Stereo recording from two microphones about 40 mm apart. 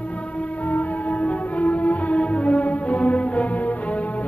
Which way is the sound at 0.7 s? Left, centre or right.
Left.